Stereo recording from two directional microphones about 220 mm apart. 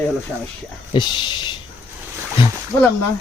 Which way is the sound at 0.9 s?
20° left (ahead or behind).